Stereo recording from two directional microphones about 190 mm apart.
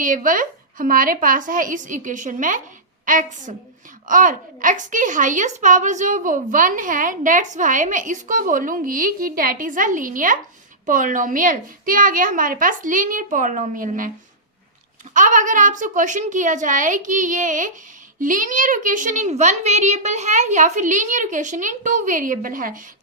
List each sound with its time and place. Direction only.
0.0 s a woman's voice: 45° right (ahead or behind)
15.1 s a child's voice: 40° right (ahead or behind)